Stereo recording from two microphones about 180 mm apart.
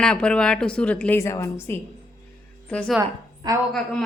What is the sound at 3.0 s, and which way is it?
Speech, 20° right (ahead or behind).